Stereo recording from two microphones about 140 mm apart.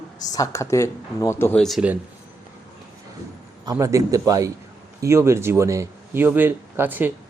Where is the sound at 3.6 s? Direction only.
25° right (ahead or behind).